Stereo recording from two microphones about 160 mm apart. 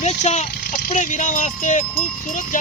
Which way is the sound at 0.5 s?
75° left (ahead or behind).